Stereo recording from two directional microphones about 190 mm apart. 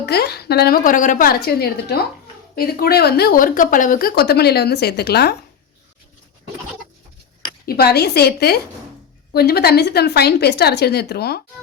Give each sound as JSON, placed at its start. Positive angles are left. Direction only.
{"t": 0.0, "sound": "speech", "side_deg": 60}
{"t": 7.6, "sound": "speech", "side_deg": 55}